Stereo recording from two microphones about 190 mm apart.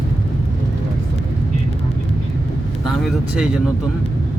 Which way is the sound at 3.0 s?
Centre (ahead or behind).